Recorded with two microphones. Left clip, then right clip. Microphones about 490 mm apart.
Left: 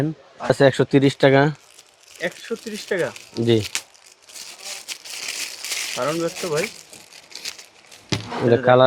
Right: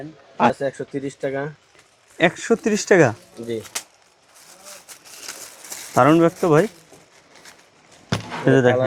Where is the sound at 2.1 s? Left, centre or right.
Right.